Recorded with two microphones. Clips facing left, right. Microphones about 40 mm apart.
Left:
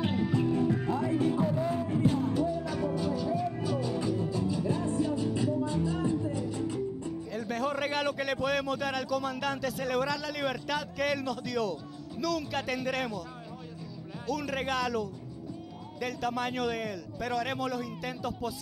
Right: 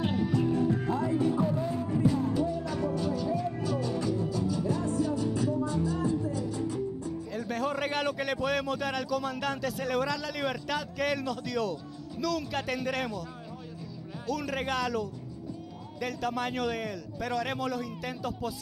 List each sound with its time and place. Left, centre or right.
0.0 s music: left
1.4 s music: centre
1.9 s music: left
2.4 s music: centre
4.0 s music: left
7.2 s a man's voice: centre
14.2 s a man's voice: centre